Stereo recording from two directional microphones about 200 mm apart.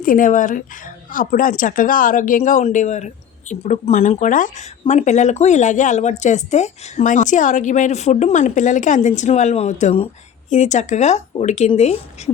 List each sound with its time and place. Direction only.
0.0 s speech: 40° left (ahead or behind)